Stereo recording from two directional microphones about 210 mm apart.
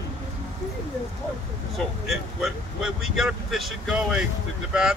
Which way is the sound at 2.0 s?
Centre (ahead or behind).